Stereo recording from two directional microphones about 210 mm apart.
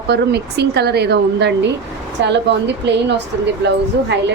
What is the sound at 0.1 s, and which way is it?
A woman's voice, 50° right (ahead or behind).